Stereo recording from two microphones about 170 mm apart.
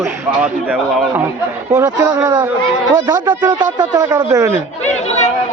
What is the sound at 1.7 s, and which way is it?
Speech, 20° right (ahead or behind).